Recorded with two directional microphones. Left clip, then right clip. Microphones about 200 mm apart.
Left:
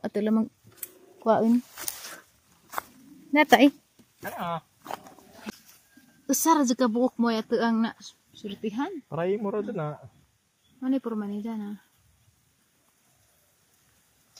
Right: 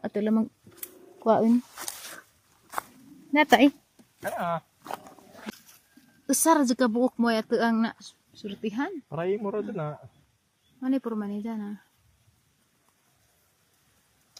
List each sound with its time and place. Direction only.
0.0 s speech: 5° left (ahead or behind)
1.2 s speech: 20° right (ahead or behind)
3.3 s speech: 5° left (ahead or behind)
4.2 s dog: centre (ahead or behind)
6.2 s speech: 15° right (ahead or behind); by 10.1 s 5° left (ahead or behind)
10.8 s speech: 10° right (ahead or behind)